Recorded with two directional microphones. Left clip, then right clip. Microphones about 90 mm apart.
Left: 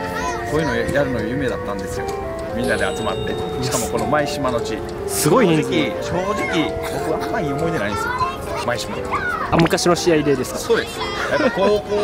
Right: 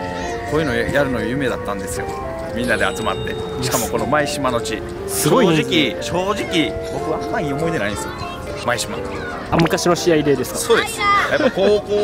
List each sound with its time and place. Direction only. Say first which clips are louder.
0.5 s speech: right 3 dB; 5° right (ahead or behind)
2.6 s speech: right 2 dB; centre (ahead or behind)
9.5 s speech: right 1 dB; centre (ahead or behind)
11.0 s speech: right 9 dB; 30° right (ahead or behind)
11.2 s speech: right 1 dB; centre (ahead or behind)